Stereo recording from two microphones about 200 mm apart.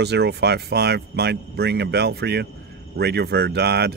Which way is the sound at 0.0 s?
55° right (ahead or behind).